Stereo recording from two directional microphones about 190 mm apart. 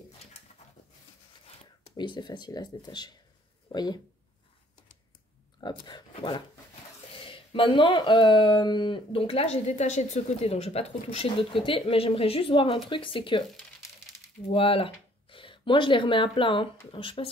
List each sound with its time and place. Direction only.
1.9 s speech: 25° left (ahead or behind)
5.6 s speech: 25° left (ahead or behind)
14.5 s speech: 30° left (ahead or behind)